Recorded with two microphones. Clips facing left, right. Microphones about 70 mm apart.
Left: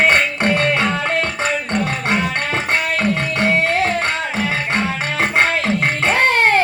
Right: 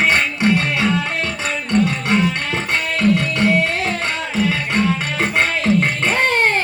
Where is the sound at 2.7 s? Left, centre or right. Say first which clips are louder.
Right 3 dB; left.